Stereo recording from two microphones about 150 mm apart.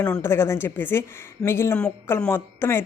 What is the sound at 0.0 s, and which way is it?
A woman's voice, 10° left (ahead or behind).